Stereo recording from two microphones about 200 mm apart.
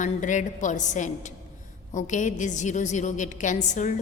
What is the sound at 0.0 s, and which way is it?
A woman's voice, 40° left (ahead or behind).